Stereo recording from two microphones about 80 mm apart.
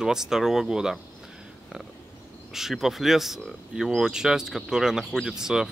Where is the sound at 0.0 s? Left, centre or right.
Centre.